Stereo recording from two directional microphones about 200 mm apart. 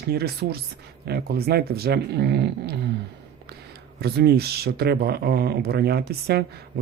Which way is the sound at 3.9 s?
55° right (ahead or behind).